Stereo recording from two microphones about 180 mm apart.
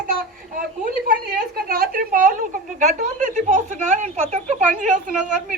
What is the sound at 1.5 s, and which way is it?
Speech, 55° right (ahead or behind).